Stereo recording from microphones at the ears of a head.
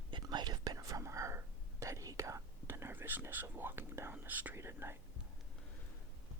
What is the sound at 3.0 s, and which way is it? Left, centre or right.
Speech, right.